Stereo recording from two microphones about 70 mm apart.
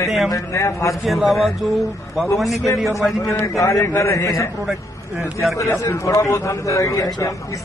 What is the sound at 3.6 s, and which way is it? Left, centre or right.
Speech, left.